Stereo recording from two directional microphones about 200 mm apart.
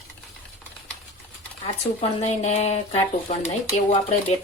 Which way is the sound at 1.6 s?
30° left (ahead or behind).